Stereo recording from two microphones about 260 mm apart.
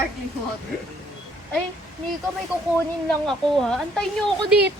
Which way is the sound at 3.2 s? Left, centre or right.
Centre.